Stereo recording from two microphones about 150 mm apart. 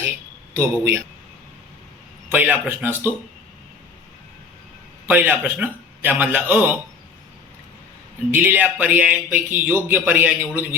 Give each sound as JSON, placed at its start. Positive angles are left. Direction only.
{"t": 0.5, "sound": "a man's voice", "side_deg": -20}
{"t": 2.3, "sound": "speech", "side_deg": -10}
{"t": 5.3, "sound": "speech", "side_deg": -10}
{"t": 8.3, "sound": "speech", "side_deg": -10}